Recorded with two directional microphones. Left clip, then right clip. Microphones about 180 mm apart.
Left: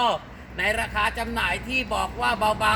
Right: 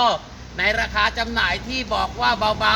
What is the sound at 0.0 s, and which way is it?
A man's voice, 20° left (ahead or behind).